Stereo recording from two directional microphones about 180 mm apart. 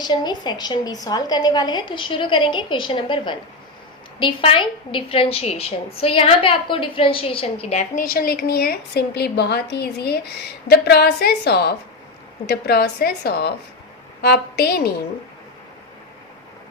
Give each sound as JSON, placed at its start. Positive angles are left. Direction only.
{"t": 0.0, "sound": "a woman's voice", "side_deg": 25}
{"t": 8.1, "sound": "a woman's voice", "side_deg": 55}